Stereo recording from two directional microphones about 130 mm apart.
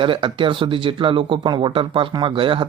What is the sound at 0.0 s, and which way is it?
Speech, 40° right (ahead or behind).